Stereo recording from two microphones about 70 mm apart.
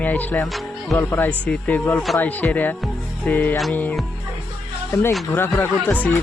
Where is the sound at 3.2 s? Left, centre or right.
Left.